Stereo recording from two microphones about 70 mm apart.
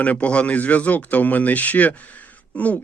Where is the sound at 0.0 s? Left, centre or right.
Left.